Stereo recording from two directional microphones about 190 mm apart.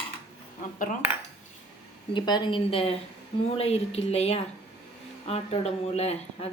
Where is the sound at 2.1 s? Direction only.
25° left (ahead or behind).